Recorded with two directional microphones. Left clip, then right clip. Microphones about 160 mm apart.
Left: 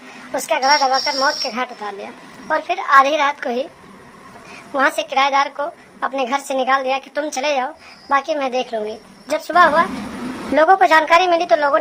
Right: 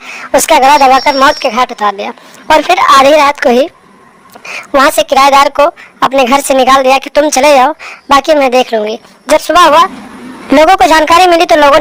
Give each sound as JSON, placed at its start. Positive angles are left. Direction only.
{"t": 0.2, "sound": "a woman's voice", "side_deg": -45}